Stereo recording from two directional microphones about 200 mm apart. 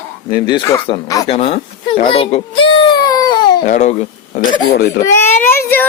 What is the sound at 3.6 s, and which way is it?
Speech, 35° left (ahead or behind).